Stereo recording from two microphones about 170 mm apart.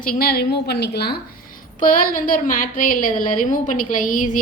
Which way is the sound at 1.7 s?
55° left (ahead or behind).